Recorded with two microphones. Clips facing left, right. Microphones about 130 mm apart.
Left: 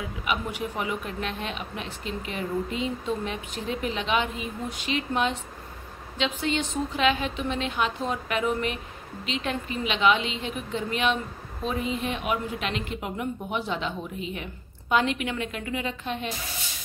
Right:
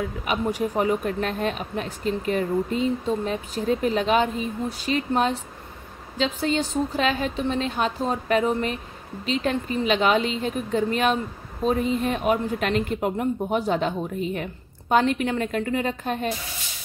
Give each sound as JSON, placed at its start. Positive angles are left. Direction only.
{"t": 0.2, "sound": "a woman's voice", "side_deg": -40}